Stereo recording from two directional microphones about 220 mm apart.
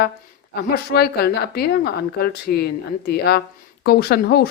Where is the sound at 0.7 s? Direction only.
45° left (ahead or behind).